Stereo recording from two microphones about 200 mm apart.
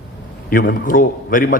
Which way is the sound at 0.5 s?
45° left (ahead or behind).